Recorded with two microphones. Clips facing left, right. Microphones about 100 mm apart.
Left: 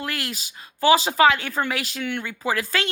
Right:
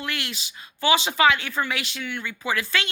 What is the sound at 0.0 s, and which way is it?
A woman's voice, 40° left (ahead or behind).